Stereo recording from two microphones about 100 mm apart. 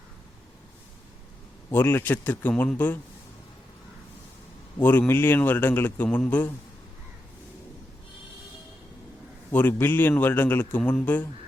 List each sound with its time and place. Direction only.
1.7 s a man's voice: 20° left (ahead or behind)
4.8 s a man's voice: 20° left (ahead or behind)
9.5 s a man's voice: 20° left (ahead or behind)